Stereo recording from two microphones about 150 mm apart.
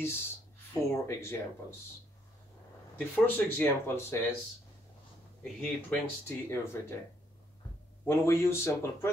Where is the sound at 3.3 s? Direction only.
15° left (ahead or behind).